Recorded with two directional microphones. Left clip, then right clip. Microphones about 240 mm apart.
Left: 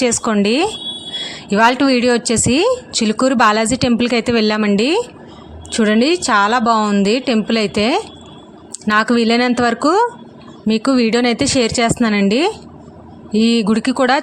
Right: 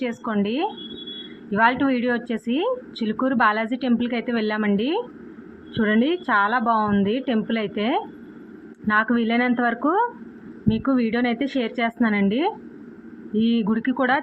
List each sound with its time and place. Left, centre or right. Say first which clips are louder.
0.0 s speech: left 10 dB; left